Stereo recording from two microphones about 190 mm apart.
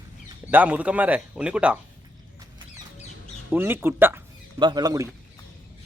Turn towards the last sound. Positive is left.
turn(degrees=-20)  # may be behind; listen again after turning